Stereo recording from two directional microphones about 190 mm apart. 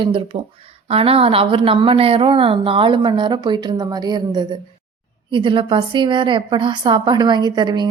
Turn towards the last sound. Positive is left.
turn(degrees=-20)  # may be behind; listen again after turning